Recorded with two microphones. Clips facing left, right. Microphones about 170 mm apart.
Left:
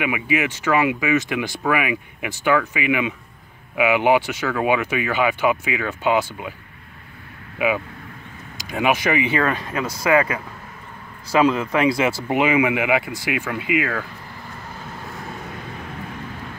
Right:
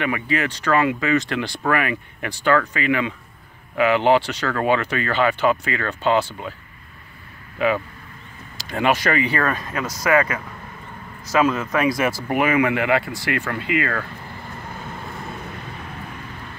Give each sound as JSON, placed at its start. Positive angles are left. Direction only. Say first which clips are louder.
{"t": 0.0, "sound": "speech", "louder": "left 1 dB", "side_deg": 10}
{"t": 7.5, "sound": "speech", "louder": "right 1 dB", "side_deg": 10}
{"t": 11.3, "sound": "speech", "louder": "left 2 dB", "side_deg": 20}